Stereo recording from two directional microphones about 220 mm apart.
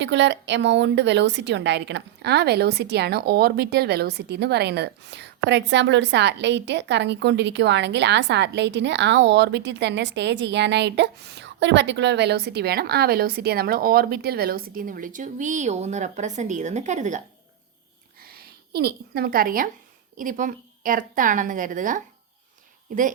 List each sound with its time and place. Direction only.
0.0 s a woman's voice: 55° right (ahead or behind); by 17.2 s 35° right (ahead or behind)
18.2 s a sound: 45° right (ahead or behind)
20.1 s a woman's voice: 35° right (ahead or behind)